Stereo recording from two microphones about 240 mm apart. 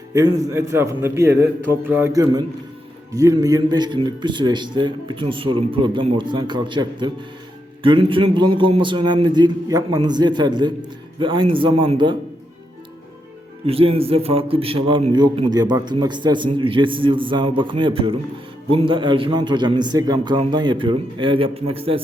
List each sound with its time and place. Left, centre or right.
0.1 s a man's voice: centre
13.7 s a man's voice: right